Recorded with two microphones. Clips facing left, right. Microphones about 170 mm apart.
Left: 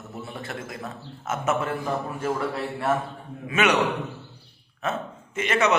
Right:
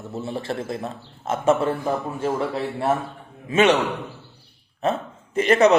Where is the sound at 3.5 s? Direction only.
30° right (ahead or behind).